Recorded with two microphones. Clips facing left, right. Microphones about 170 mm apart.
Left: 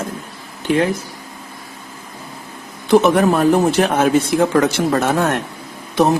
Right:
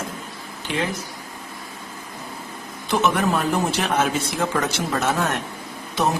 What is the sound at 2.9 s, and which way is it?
A man's voice, 55° left (ahead or behind).